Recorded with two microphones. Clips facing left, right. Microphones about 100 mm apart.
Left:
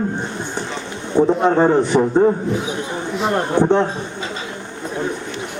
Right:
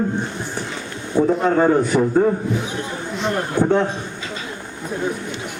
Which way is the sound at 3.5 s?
20° left (ahead or behind).